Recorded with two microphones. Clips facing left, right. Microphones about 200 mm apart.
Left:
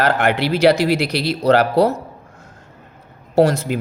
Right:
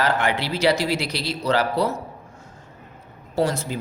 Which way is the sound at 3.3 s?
70° left (ahead or behind).